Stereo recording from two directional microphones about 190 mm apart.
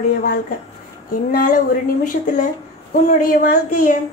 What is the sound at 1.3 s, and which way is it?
Speech, 50° left (ahead or behind).